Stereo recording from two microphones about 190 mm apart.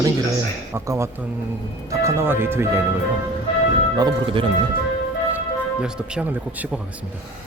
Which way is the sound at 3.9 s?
25° right (ahead or behind).